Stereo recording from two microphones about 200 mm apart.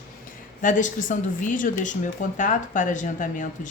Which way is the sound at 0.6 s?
40° left (ahead or behind).